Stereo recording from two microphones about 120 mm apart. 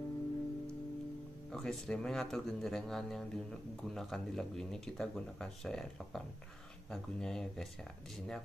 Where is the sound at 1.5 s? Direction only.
5° left (ahead or behind).